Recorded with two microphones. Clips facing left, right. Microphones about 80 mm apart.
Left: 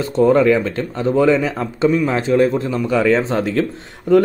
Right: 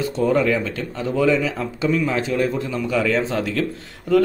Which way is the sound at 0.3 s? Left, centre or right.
Left.